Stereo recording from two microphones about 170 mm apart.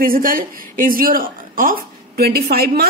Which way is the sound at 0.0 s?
55° right (ahead or behind).